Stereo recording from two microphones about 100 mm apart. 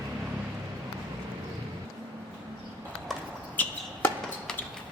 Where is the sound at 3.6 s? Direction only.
20° left (ahead or behind).